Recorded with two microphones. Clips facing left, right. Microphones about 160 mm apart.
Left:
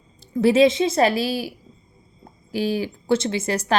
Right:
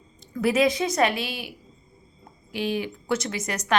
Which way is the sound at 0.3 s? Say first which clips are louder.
Left 6 dB; 25° left (ahead or behind).